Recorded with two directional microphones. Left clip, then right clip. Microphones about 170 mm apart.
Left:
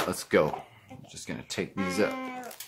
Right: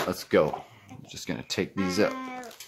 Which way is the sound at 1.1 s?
30° right (ahead or behind).